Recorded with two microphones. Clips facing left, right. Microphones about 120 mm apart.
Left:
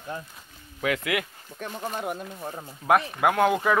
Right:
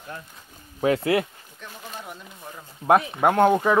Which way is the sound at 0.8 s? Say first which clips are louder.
Right 6 dB; 30° right (ahead or behind).